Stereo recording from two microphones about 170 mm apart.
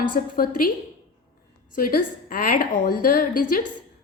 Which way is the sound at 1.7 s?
55° left (ahead or behind).